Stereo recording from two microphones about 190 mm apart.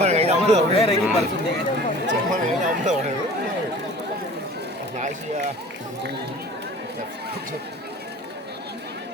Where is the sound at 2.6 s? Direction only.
40° right (ahead or behind).